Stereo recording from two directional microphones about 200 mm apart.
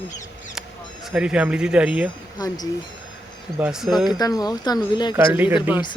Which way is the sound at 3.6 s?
5° right (ahead or behind).